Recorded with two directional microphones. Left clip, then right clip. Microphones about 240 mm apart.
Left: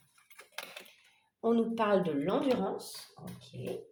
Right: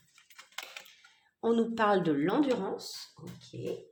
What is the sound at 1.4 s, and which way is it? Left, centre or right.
Speech, right.